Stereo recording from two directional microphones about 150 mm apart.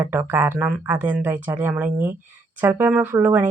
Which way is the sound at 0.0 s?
15° right (ahead or behind).